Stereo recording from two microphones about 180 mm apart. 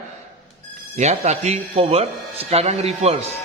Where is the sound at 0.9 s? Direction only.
40° right (ahead or behind).